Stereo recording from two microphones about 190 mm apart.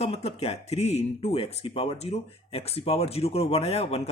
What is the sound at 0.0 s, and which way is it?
Speech, 35° left (ahead or behind).